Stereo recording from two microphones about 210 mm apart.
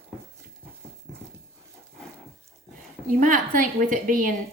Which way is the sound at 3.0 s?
40° right (ahead or behind).